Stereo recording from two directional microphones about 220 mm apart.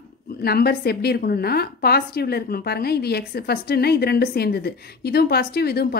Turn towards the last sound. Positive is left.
turn(degrees=45)  # may be behind; listen again after turning